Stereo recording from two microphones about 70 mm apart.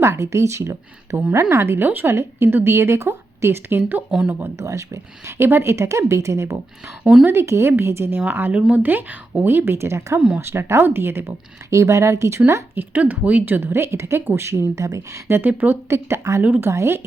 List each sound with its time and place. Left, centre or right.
0.0 s a woman's voice: right
4.5 s a woman's voice: right
10.2 s speech: centre
10.4 s a woman's voice: right
12.7 s a woman's voice: right
15.4 s a woman's voice: right
15.9 s a woman's voice: right
16.4 s a woman's voice: right
16.6 s a woman's voice: right